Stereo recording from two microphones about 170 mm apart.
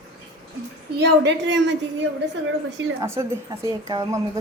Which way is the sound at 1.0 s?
90° right.